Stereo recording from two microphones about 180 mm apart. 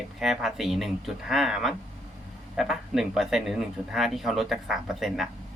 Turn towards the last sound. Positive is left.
turn(degrees=0)  # may be behind; listen again after turning